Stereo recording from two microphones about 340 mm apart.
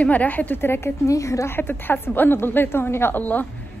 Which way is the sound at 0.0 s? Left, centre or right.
Centre.